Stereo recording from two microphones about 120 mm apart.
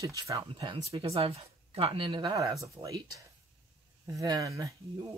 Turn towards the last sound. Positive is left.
turn(degrees=-25)  # may be behind; listen again after turning